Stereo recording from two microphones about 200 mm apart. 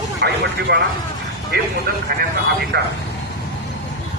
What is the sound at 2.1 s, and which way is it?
Speech, 50° right (ahead or behind).